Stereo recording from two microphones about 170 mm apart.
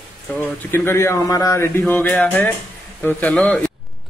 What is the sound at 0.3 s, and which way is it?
Speech, 10° left (ahead or behind).